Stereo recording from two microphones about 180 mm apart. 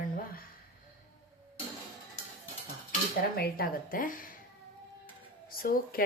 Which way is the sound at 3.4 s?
55° left (ahead or behind).